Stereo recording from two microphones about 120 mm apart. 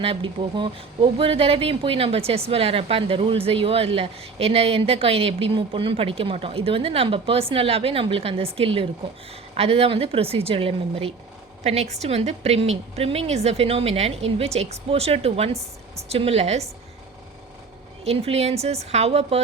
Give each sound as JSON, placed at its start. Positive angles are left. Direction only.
{"t": 0.0, "sound": "a woman's voice", "side_deg": -50}
{"t": 11.6, "sound": "a woman's voice", "side_deg": -65}
{"t": 18.0, "sound": "a woman's voice", "side_deg": -55}